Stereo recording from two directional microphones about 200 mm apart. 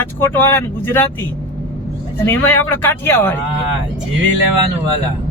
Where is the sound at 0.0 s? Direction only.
10° left (ahead or behind).